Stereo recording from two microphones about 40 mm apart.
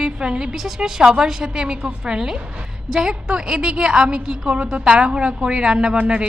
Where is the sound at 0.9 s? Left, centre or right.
Centre.